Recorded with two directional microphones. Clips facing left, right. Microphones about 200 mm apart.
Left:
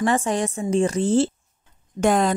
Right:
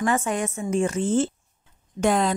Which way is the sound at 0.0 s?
35° left (ahead or behind).